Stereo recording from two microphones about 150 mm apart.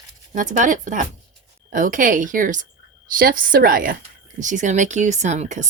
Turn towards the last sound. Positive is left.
turn(degrees=-50)  # may be behind; listen again after turning